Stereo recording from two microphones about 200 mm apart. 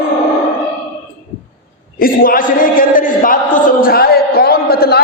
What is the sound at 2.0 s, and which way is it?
A man's voice, 45° left (ahead or behind).